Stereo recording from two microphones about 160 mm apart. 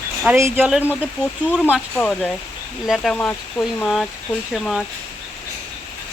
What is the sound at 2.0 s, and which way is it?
Speech, 5° left (ahead or behind).